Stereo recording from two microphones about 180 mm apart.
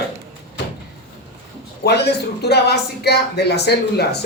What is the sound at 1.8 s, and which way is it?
Speech, 65° left (ahead or behind).